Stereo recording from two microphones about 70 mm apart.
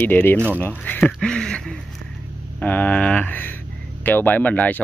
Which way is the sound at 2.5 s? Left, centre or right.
Left.